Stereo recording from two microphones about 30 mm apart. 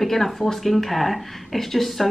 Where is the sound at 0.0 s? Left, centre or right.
Centre.